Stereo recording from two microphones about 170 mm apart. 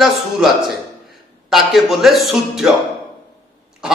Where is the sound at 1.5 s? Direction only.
Centre (ahead or behind).